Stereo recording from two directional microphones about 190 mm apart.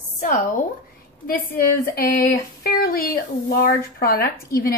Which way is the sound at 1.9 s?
50° left (ahead or behind).